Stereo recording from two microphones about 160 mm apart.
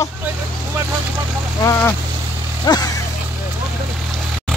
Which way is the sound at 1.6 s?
15° left (ahead or behind).